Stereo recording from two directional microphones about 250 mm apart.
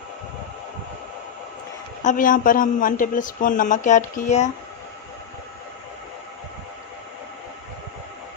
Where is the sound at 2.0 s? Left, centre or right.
Left.